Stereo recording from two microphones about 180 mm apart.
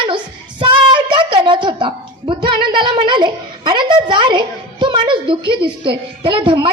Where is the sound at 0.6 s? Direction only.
25° right (ahead or behind).